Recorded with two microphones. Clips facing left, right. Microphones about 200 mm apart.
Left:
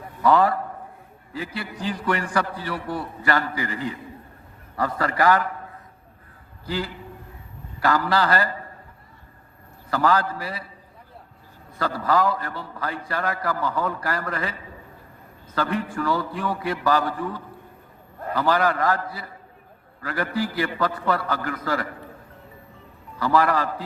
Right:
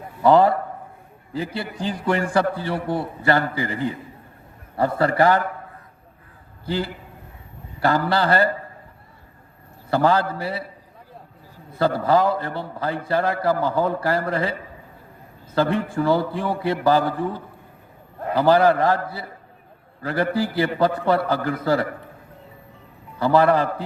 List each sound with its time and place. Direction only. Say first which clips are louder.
0.2 s a man's voice: right 4 dB; 25° right (ahead or behind)
1.5 s a man's voice: right 2 dB; 25° right (ahead or behind)
4.8 s a man's voice: right 5 dB; 25° right (ahead or behind)
6.7 s a man's voice: right 3 dB; 25° right (ahead or behind)
9.9 s a man's voice: right 3 dB; 25° right (ahead or behind)
11.9 s a man's voice: right 1 dB; 25° right (ahead or behind)
15.5 s a man's voice: right 5 dB; 25° right (ahead or behind)
23.2 s a man's voice: right 4 dB; 30° right (ahead or behind)